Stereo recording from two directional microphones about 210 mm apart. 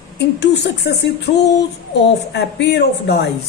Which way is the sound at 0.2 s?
55° left (ahead or behind).